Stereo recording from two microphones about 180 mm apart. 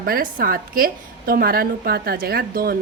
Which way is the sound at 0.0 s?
50° right (ahead or behind).